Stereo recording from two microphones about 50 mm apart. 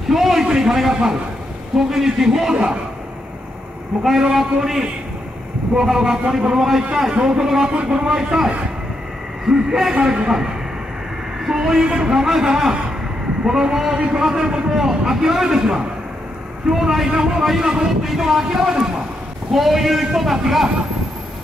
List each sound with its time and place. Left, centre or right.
0.1 s a man's voice: centre
4.2 s a man's voice: centre